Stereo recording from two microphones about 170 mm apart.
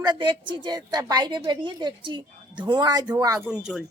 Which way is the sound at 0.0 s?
25° right (ahead or behind).